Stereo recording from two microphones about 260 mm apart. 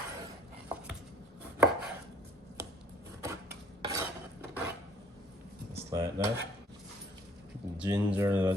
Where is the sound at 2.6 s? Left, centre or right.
Centre.